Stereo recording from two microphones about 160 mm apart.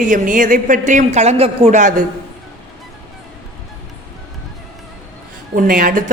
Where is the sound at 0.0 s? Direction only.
55° right (ahead or behind).